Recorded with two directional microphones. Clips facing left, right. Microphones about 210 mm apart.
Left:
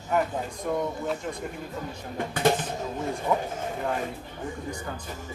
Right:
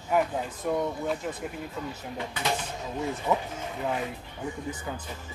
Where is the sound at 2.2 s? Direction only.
50° left (ahead or behind).